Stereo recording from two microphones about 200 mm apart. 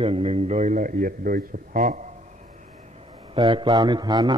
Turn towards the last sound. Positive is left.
turn(degrees=-20)  # may be behind; listen again after turning